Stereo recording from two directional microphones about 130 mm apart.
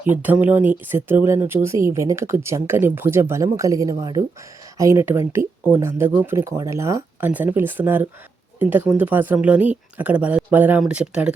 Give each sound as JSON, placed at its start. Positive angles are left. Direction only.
{"t": 0.0, "sound": "speech", "side_deg": -15}